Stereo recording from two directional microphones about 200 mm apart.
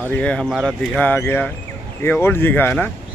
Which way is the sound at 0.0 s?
5° left (ahead or behind).